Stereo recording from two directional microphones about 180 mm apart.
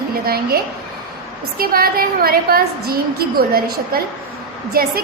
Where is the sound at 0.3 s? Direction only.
55° right (ahead or behind).